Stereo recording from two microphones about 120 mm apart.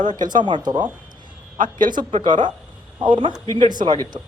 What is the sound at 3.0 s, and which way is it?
Speech, 40° right (ahead or behind).